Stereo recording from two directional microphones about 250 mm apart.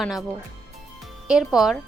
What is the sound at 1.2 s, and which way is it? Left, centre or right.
Speech, centre.